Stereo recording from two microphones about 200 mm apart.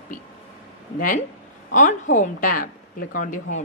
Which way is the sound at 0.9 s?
45° left (ahead or behind).